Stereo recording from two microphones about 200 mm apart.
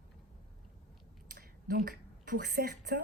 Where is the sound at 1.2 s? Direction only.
45° right (ahead or behind).